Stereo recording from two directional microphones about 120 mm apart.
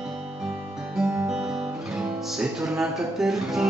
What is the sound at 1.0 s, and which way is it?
Music, 20° right (ahead or behind).